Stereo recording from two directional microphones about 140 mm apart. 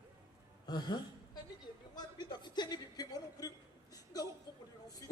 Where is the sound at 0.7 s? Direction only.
30° left (ahead or behind).